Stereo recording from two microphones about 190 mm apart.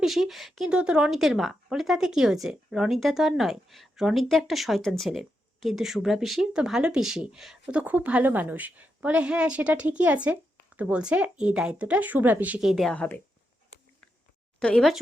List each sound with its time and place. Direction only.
0.0 s speech: centre (ahead or behind)
14.6 s speech: 5° left (ahead or behind)